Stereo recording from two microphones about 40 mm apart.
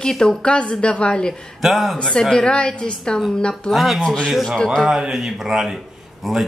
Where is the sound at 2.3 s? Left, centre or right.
Left.